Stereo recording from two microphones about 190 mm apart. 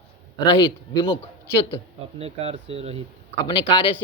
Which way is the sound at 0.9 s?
25° left (ahead or behind).